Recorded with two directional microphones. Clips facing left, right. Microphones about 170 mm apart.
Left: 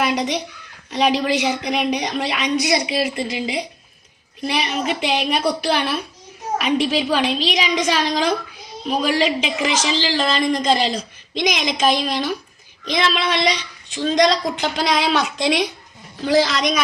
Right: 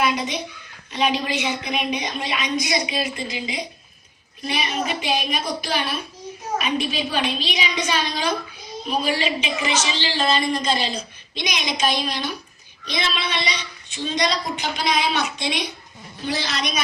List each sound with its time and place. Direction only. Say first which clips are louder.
0.0 s a woman's voice: left 3 dB; 75° left (ahead or behind)
0.9 s a woman's voice: left 4 dB; 85° left